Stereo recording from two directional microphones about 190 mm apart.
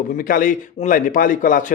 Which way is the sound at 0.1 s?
45° left (ahead or behind).